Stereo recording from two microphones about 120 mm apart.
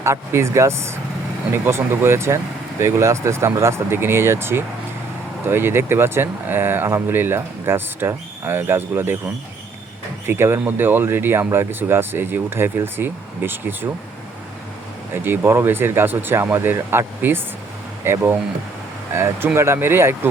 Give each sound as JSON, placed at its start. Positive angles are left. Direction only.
{"t": 0.0, "sound": "speech", "side_deg": -25}
{"t": 10.2, "sound": "speech", "side_deg": -20}
{"t": 15.1, "sound": "speech", "side_deg": -20}